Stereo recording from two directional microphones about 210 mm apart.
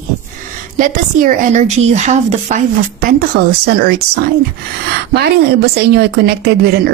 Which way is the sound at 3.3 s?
45° right (ahead or behind).